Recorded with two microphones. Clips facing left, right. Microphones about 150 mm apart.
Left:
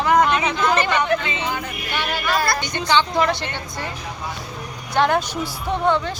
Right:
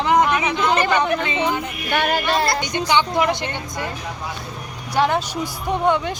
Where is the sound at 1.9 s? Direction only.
50° right (ahead or behind).